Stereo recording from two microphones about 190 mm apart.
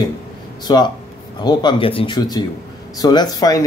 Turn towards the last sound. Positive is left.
turn(degrees=20)  # may be behind; listen again after turning